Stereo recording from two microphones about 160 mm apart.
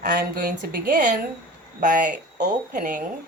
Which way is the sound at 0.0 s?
60° right (ahead or behind).